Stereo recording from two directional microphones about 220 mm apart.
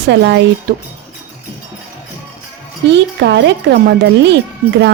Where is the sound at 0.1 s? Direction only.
55° right (ahead or behind).